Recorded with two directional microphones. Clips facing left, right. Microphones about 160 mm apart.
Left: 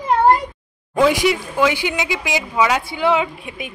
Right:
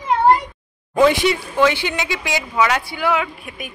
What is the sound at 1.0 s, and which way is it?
Speech, 10° left (ahead or behind).